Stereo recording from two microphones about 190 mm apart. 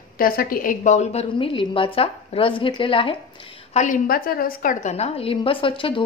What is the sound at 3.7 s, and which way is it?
A woman's voice, 40° left (ahead or behind).